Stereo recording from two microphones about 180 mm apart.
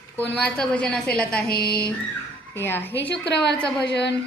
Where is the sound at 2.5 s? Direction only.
10° left (ahead or behind).